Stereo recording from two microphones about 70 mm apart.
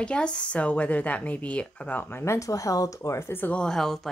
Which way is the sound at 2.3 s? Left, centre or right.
Left.